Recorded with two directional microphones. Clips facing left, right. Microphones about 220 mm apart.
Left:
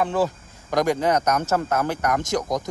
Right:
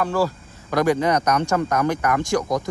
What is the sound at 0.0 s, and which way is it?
Speech, 20° left (ahead or behind).